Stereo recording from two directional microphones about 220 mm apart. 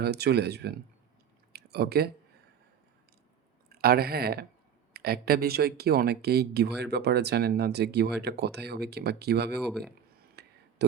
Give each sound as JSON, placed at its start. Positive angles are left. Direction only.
{"t": 0.0, "sound": "speech", "side_deg": -50}
{"t": 1.5, "sound": "a sound", "side_deg": -45}
{"t": 3.7, "sound": "speech", "side_deg": -45}
{"t": 9.6, "sound": "speech", "side_deg": 0}
{"t": 10.4, "sound": "a sound", "side_deg": -50}
{"t": 10.8, "sound": "speech", "side_deg": -50}